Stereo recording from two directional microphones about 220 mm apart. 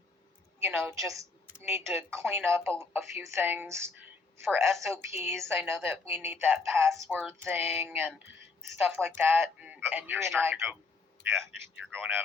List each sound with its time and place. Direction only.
0.6 s a woman's voice: 5° right (ahead or behind)
5.1 s speech: 10° right (ahead or behind)